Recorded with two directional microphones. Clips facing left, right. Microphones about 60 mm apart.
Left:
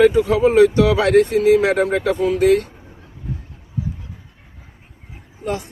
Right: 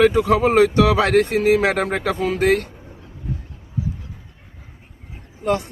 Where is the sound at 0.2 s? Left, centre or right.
Right.